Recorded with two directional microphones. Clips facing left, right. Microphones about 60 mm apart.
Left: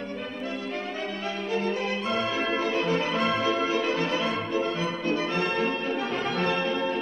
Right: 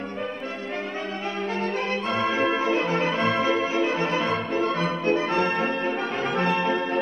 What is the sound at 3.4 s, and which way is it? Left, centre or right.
Music, right.